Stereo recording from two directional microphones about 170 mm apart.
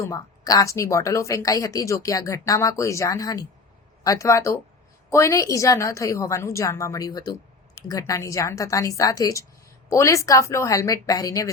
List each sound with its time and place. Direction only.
0.0 s a woman's voice: 20° left (ahead or behind)